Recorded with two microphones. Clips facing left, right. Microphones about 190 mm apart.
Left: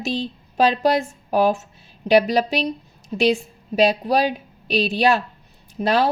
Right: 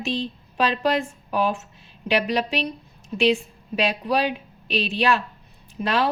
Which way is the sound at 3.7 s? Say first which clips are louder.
Left 5 dB; 40° left (ahead or behind).